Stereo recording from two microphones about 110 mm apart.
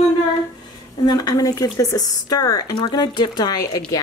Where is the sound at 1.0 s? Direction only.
35° left (ahead or behind).